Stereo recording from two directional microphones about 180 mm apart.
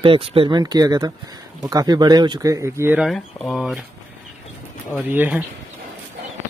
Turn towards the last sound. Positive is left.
turn(degrees=-10)  # may be behind; listen again after turning